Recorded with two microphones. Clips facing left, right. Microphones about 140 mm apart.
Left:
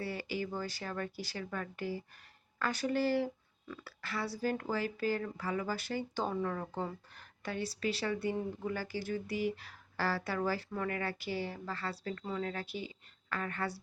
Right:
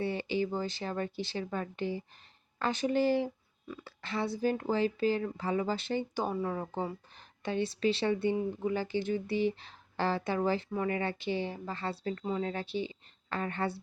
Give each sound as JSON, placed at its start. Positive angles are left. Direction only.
{"t": 0.0, "sound": "speech", "side_deg": -25}
{"t": 6.1, "sound": "speech", "side_deg": -10}